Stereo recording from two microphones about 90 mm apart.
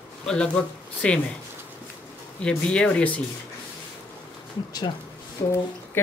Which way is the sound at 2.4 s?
10° left (ahead or behind).